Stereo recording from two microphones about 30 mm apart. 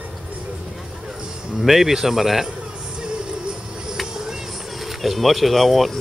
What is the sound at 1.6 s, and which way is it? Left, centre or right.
Speech, centre.